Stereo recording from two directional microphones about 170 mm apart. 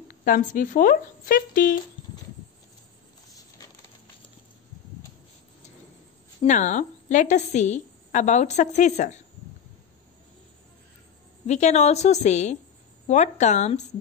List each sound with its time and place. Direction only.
0.1 s speech: 55° left (ahead or behind)
6.4 s a woman's voice: 45° left (ahead or behind)
11.4 s a woman's voice: 40° left (ahead or behind)